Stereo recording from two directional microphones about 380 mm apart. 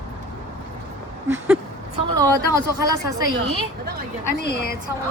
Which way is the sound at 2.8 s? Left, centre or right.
Left.